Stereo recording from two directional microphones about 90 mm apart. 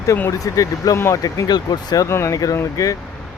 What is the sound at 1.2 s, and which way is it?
Speech, 45° left (ahead or behind).